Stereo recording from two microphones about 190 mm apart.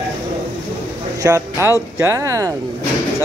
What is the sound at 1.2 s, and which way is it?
Speech, 15° right (ahead or behind).